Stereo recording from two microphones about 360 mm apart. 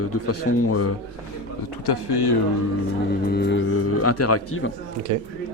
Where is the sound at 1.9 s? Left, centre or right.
Left.